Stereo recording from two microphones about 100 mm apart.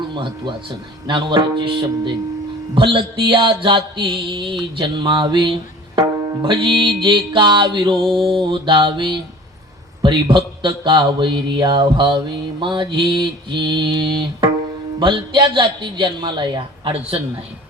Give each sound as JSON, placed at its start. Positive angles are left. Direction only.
{"t": 0.1, "sound": "a man's voice", "side_deg": -50}